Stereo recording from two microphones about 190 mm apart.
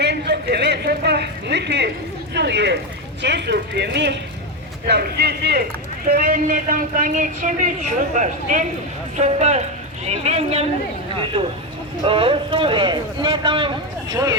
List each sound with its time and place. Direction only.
0.0 s a sound: 60° right (ahead or behind)
2.3 s a man's voice: 65° right (ahead or behind); by 10.7 s 35° right (ahead or behind)
12.0 s speech: 30° right (ahead or behind)